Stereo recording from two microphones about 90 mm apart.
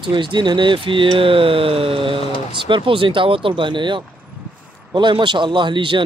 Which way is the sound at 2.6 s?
70° right (ahead or behind).